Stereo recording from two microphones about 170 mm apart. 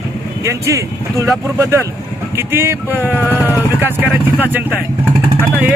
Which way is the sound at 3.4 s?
10° right (ahead or behind).